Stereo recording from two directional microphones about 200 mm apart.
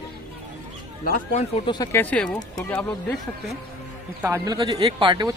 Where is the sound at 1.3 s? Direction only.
25° left (ahead or behind).